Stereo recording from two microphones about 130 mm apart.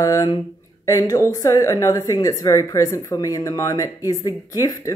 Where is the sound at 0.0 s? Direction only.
25° left (ahead or behind).